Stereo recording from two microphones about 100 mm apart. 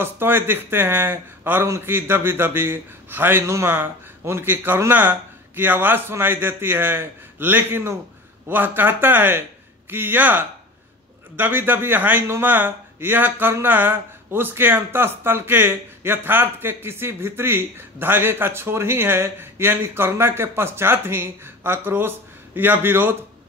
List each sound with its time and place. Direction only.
0.0 s speech: 20° right (ahead or behind)